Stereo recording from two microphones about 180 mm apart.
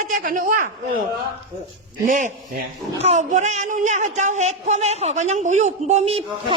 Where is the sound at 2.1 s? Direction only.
45° right (ahead or behind).